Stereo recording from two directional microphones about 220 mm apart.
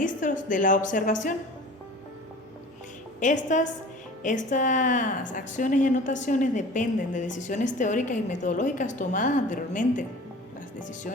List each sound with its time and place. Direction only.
0.0 s a woman's voice: 35° left (ahead or behind)
3.2 s a woman's voice: 35° left (ahead or behind)